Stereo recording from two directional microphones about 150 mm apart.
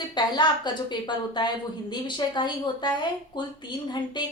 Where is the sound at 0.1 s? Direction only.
30° left (ahead or behind).